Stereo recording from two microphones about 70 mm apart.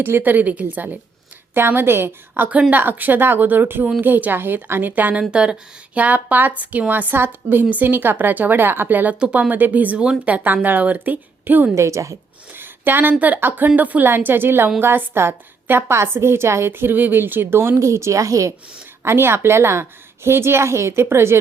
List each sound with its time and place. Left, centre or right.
0.0 s a woman's voice: right
11.7 s a woman's voice: right
12.5 s a woman's voice: right
19.0 s a woman's voice: right